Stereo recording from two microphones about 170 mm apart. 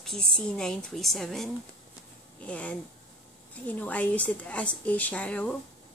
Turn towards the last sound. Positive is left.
turn(degrees=5)  # may be behind; listen again after turning